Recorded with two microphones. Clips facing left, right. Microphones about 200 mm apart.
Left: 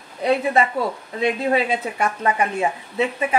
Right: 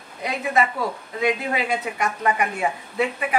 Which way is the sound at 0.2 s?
30° left (ahead or behind).